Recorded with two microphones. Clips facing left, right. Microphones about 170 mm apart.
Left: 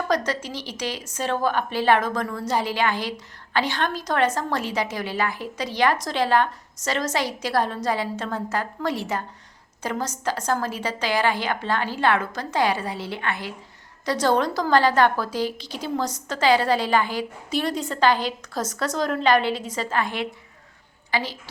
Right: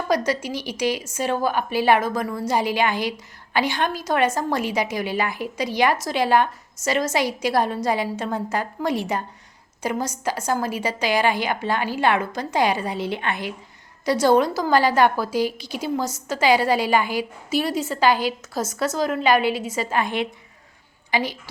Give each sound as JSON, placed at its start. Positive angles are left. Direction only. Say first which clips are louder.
{"t": 0.1, "sound": "a woman's voice", "louder": "right 5 dB", "side_deg": -10}